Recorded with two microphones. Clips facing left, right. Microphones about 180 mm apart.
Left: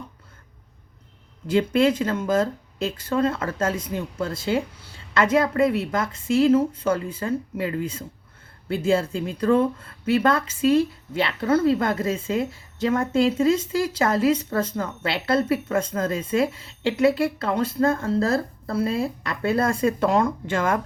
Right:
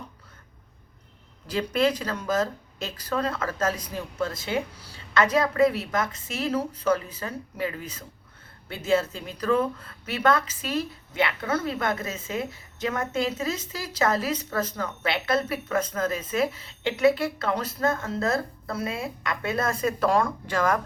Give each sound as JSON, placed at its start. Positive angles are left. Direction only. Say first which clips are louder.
{"t": 1.5, "sound": "speech", "louder": "left 5 dB", "side_deg": 25}